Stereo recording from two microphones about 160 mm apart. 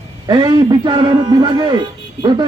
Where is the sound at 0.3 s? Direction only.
30° right (ahead or behind).